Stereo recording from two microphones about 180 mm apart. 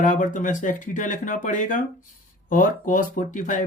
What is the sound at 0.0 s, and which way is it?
Speech, 45° left (ahead or behind).